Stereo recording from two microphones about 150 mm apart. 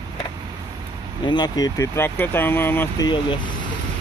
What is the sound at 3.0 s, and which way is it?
Speech, 30° left (ahead or behind).